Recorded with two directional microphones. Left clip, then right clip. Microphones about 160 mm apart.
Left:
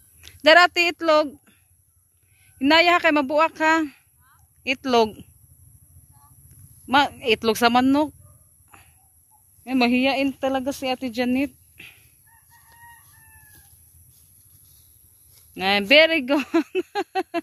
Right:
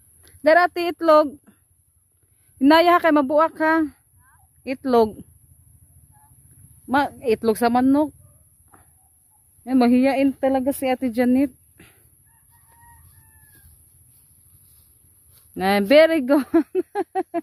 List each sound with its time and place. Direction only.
0.2 s speech: 15° right (ahead or behind); by 1.6 s 35° right (ahead or behind)
2.6 s speech: 35° right (ahead or behind)
6.9 s speech: 20° right (ahead or behind)
9.7 s speech: 40° right (ahead or behind)
15.5 s speech: 40° right (ahead or behind)
16.4 s speech: 20° right (ahead or behind)